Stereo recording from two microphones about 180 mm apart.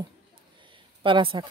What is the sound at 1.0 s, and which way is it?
Speech, 30° right (ahead or behind).